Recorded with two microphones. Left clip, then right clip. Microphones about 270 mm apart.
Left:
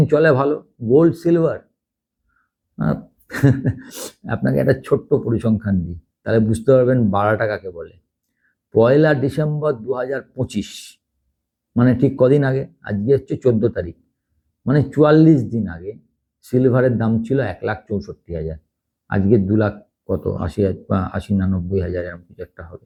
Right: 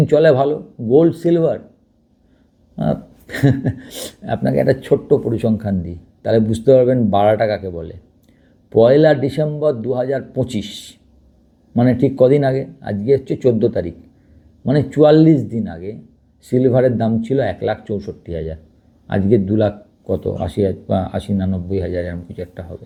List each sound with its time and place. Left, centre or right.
0.0 s a man's voice: right
2.7 s speech: right
3.5 s a sound: right
3.8 s a man's voice: right
8.7 s a man's voice: right